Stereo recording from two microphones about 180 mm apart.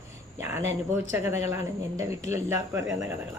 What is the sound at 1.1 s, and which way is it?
Speech, 15° right (ahead or behind).